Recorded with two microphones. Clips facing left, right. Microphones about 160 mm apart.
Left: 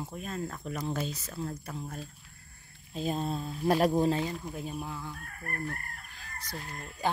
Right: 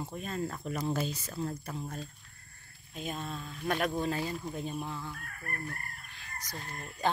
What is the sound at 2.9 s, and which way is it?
Speech, 30° left (ahead or behind).